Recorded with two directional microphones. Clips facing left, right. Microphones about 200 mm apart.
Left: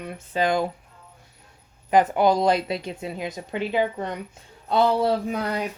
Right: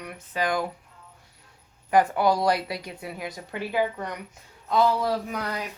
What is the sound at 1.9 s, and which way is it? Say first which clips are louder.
A woman's voice: left 2 dB; 20° left (ahead or behind).